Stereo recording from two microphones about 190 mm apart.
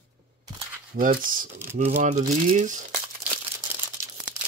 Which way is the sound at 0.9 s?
45° right (ahead or behind).